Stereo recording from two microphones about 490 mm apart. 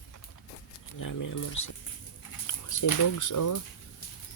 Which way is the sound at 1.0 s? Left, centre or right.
Left.